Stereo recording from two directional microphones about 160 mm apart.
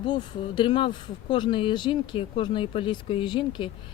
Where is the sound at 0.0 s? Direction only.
30° left (ahead or behind).